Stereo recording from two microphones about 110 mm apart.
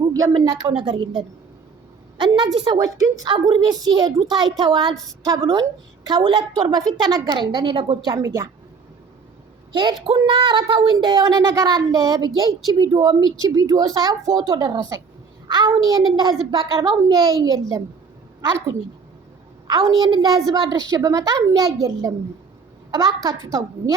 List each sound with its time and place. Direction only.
0.0 s a sound: 35° right (ahead or behind)
0.7 s a woman's voice: 50° right (ahead or behind)
2.1 s a sound: 45° right (ahead or behind)
2.6 s a woman's voice: 35° right (ahead or behind)
3.2 s a woman's voice: 50° right (ahead or behind)
8.1 s a woman's voice: 30° right (ahead or behind)
9.7 s a woman's voice: 45° right (ahead or behind)
10.9 s a woman's voice: 35° right (ahead or behind)
19.6 s a woman's voice: 40° right (ahead or behind)